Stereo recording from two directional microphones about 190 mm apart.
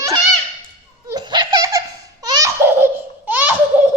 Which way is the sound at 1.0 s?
20° right (ahead or behind).